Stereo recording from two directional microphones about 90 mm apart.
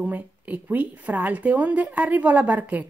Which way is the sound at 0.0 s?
20° right (ahead or behind).